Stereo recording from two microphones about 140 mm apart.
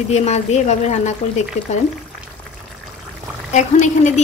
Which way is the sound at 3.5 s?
60° left (ahead or behind).